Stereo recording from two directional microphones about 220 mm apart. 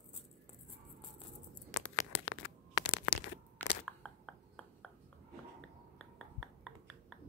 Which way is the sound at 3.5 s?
5° left (ahead or behind).